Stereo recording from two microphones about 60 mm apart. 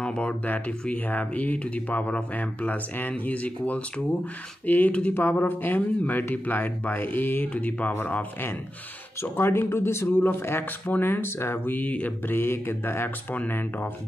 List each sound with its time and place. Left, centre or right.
0.0 s speech: centre
9.2 s speech: left
12.3 s speech: left